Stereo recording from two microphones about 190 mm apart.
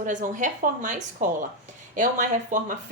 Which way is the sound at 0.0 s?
40° right (ahead or behind).